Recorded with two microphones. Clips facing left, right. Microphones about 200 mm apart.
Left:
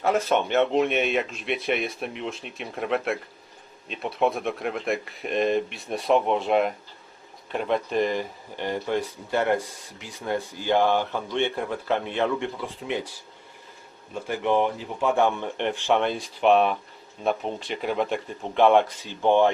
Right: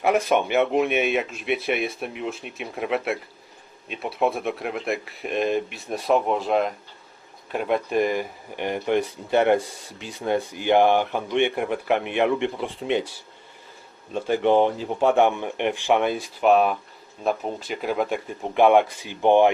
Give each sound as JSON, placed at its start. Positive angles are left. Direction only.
{"t": 0.0, "sound": "speech", "side_deg": -15}
{"t": 14.1, "sound": "speech", "side_deg": -30}